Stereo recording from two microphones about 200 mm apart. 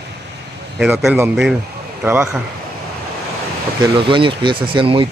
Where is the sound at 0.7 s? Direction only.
5° right (ahead or behind).